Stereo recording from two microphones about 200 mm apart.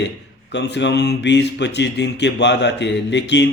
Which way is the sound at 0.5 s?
60° left (ahead or behind).